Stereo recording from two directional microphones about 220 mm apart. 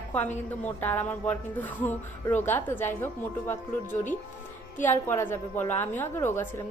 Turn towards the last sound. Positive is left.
turn(degrees=10)  # may be behind; listen again after turning